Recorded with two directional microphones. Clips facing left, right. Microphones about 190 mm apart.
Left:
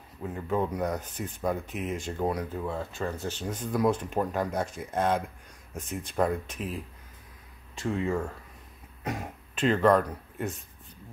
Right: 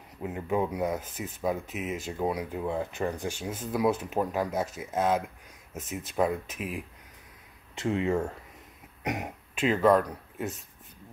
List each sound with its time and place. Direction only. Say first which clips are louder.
0.2 s speech: right 1 dB; 15° right (ahead or behind)
2.5 s speech: right 2 dB; 15° right (ahead or behind)
7.7 s speech: right 2 dB; 20° right (ahead or behind)
9.6 s speech: even; 5° right (ahead or behind)